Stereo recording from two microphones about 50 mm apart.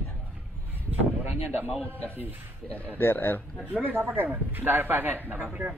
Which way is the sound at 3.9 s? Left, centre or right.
Right.